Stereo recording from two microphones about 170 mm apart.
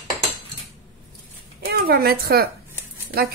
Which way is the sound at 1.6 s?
65° right (ahead or behind).